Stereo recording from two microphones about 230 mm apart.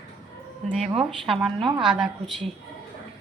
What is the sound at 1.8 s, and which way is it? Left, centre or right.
Speech, centre.